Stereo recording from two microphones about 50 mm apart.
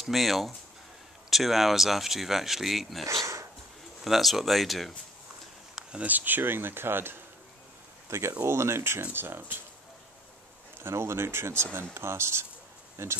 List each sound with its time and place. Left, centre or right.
0.0 s speech: centre
3.1 s speech: right
4.0 s speech: centre
5.8 s a sound: centre
6.0 s speech: right
8.1 s speech: right
9.1 s speech: right
10.8 s speech: right